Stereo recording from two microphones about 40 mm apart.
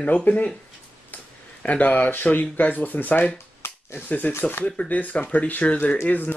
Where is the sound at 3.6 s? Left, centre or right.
Left.